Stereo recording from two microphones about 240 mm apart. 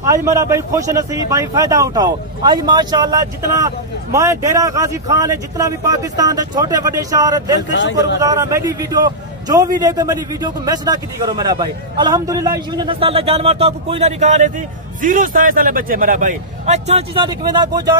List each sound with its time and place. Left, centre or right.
0.0 s a man's voice: centre